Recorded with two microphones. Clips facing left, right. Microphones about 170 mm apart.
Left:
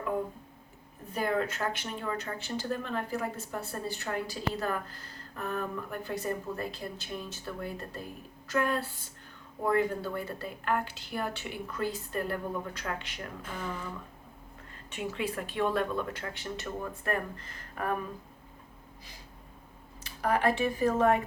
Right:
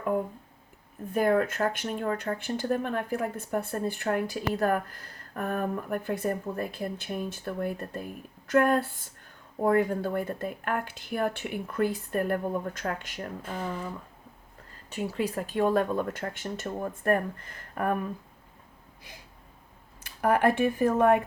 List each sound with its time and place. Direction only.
1.1 s speech: 50° right (ahead or behind)
14.8 s speech: 40° right (ahead or behind)
20.1 s speech: 55° right (ahead or behind)